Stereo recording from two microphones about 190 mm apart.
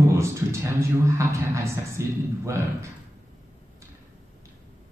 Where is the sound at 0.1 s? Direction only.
15° right (ahead or behind).